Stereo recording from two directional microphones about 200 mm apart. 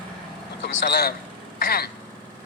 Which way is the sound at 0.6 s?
55° left (ahead or behind).